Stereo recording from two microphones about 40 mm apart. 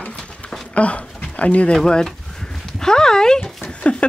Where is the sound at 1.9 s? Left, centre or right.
Centre.